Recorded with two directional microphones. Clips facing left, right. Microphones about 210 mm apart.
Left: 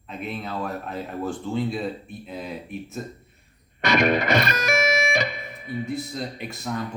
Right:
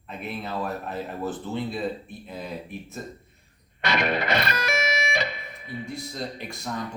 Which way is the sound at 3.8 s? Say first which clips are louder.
Left 5 dB; 45° left (ahead or behind).